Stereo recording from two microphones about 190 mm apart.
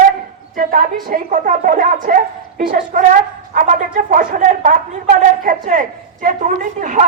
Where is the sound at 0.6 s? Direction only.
45° right (ahead or behind).